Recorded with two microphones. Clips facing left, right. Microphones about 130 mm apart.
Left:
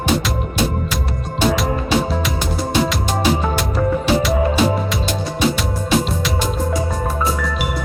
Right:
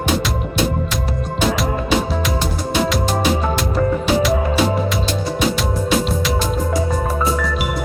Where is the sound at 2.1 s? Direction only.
Centre (ahead or behind).